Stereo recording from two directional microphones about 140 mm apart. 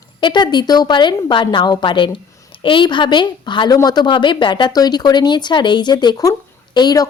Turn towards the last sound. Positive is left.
turn(degrees=30)  # may be behind; listen again after turning